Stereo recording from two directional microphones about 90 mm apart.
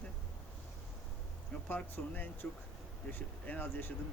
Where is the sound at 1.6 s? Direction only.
20° left (ahead or behind).